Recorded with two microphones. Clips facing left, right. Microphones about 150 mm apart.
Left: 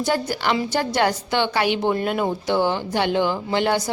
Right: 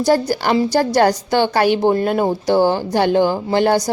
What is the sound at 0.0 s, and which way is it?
A woman's voice, 40° right (ahead or behind).